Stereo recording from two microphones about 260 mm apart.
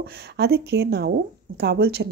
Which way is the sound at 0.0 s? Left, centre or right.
Right.